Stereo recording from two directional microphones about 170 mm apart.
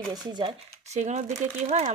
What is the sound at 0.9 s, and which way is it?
Speech, 45° right (ahead or behind).